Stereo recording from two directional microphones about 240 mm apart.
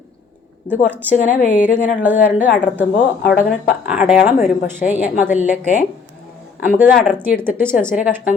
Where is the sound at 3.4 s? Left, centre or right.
Centre.